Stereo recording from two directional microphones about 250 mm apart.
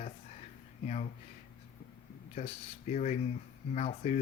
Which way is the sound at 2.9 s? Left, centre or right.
Left.